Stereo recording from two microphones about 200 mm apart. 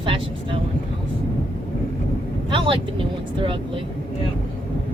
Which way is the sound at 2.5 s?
25° right (ahead or behind).